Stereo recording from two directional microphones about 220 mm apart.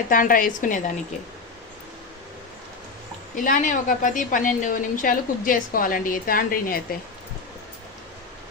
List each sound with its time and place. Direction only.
0.1 s a woman's voice: 40° left (ahead or behind)
3.3 s a woman's voice: 35° left (ahead or behind)